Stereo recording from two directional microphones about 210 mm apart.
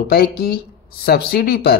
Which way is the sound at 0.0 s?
45° left (ahead or behind).